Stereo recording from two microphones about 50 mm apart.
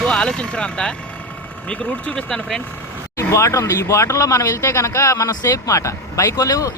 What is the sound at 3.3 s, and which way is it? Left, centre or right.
Speech, left.